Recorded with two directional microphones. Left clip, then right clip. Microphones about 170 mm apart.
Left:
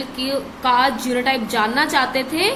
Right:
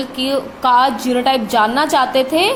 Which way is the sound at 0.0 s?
30° right (ahead or behind).